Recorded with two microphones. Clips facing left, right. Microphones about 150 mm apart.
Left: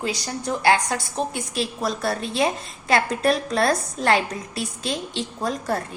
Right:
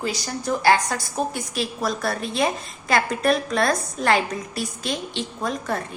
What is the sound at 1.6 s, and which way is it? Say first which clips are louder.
A woman's voice: even; 30° left (ahead or behind).